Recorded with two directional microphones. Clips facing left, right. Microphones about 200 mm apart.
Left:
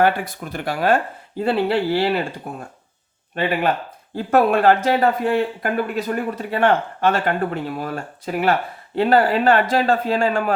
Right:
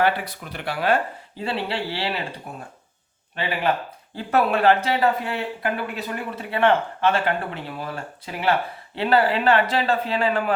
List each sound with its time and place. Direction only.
0.0 s speech: 45° left (ahead or behind)
4.1 s speech: 45° left (ahead or behind)